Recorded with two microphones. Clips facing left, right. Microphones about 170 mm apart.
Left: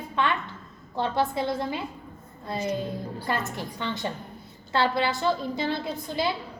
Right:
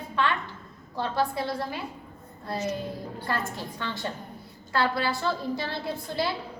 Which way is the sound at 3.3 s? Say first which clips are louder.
Left 1 dB; 20° left (ahead or behind).